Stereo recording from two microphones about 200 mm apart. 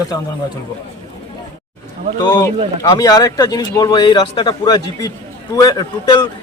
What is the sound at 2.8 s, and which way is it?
Speech, 20° left (ahead or behind).